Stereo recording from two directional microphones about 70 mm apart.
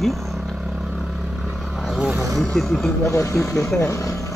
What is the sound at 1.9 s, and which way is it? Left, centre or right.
Vehicle, centre.